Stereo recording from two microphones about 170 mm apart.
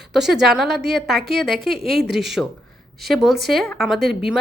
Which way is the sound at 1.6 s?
70° right (ahead or behind).